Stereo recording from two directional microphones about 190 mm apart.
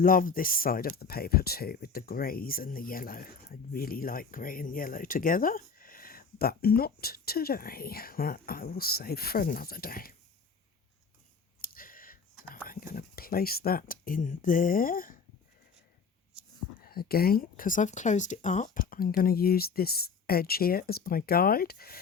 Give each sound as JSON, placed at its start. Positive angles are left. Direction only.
{"t": 0.0, "sound": "speech", "side_deg": 45}
{"t": 11.6, "sound": "computer keyboard", "side_deg": 50}
{"t": 12.6, "sound": "speech", "side_deg": 50}
{"t": 16.8, "sound": "speech", "side_deg": 50}